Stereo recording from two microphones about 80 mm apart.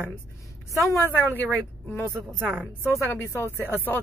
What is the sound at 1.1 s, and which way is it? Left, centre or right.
Speech, left.